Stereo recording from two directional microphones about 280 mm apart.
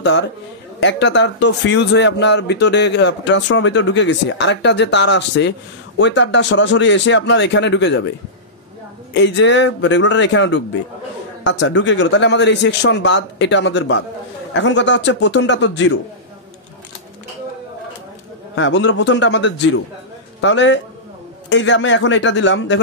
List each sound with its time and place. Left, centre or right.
0.0 s a man's voice: left
9.1 s a man's voice: left
18.6 s a man's voice: left